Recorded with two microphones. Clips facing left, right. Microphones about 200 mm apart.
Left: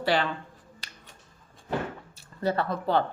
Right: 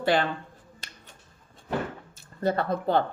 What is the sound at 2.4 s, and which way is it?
Speech, 50° right (ahead or behind).